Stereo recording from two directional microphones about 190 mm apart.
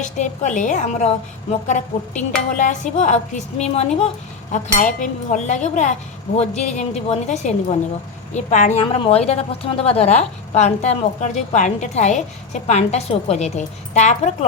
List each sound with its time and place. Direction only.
0.0 s a woman's voice: 40° left (ahead or behind)